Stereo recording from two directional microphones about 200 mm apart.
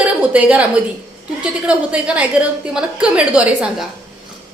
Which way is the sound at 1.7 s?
5° right (ahead or behind).